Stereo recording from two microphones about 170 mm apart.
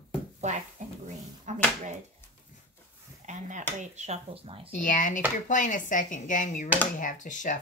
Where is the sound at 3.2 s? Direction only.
45° right (ahead or behind).